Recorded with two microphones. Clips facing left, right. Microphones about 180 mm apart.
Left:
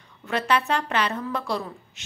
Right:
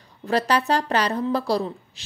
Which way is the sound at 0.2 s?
35° right (ahead or behind).